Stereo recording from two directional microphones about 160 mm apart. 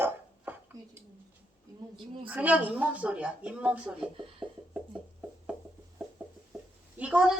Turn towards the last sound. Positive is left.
turn(degrees=-5)  # may be behind; listen again after turning